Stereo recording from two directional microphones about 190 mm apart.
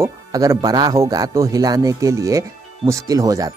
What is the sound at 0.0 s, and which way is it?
Speech, 15° right (ahead or behind).